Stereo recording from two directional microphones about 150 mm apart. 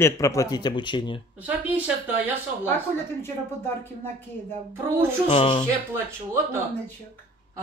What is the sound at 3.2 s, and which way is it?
Speech, 15° left (ahead or behind).